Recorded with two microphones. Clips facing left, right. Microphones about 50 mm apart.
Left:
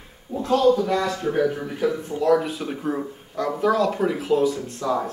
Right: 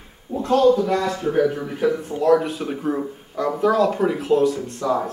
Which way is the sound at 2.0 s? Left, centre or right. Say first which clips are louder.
Right 2 dB; centre.